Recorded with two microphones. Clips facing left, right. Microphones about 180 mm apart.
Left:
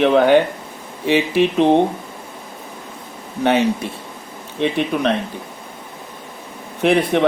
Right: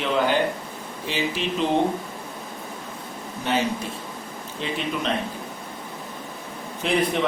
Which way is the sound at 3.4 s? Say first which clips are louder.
Left 8 dB; 65° left (ahead or behind).